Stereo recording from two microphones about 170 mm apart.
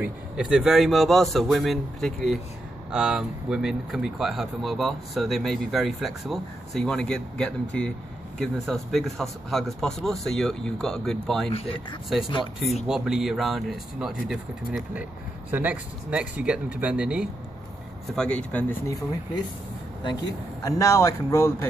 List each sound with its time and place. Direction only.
0.0 s speech: 5° right (ahead or behind)
12.8 s speech: 5° right (ahead or behind)
18.1 s speech: 5° left (ahead or behind)
20.6 s speech: 20° left (ahead or behind)